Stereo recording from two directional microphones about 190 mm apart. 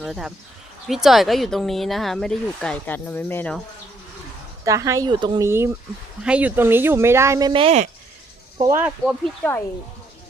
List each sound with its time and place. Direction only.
0.0 s speech: centre (ahead or behind)
4.6 s speech: 15° right (ahead or behind)
8.7 s speech: 10° right (ahead or behind)
9.2 s speech: 10° left (ahead or behind)